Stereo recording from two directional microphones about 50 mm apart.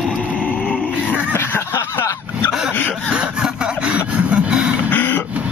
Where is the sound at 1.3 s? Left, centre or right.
Left.